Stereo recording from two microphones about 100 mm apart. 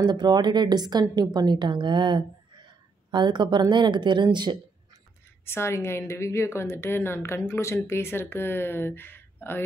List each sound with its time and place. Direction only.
0.0 s a woman's voice: 45° right (ahead or behind)
5.4 s a woman's voice: 25° left (ahead or behind)